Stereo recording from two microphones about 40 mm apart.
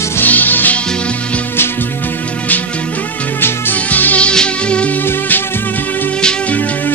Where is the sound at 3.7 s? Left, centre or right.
Left.